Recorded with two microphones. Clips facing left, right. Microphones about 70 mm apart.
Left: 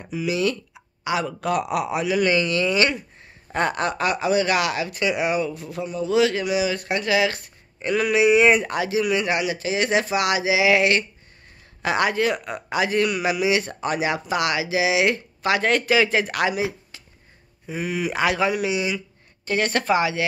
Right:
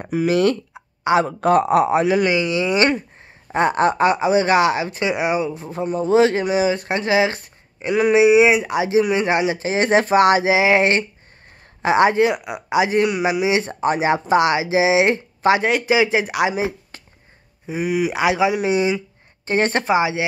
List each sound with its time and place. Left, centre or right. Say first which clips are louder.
0.0 s speech: right 6 dB; right
0.7 s speech: right 8 dB; right
2.2 s speech: right 2 dB; centre
15.7 s speech: right 2 dB; centre
16.9 s a sound: right 4 dB; right
17.6 s speech: right 5 dB; centre
18.6 s speech: right 5 dB; right
19.8 s speech: right 3 dB; centre